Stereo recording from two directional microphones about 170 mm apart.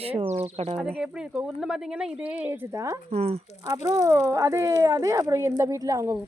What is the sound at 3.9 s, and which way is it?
Speech, 20° right (ahead or behind).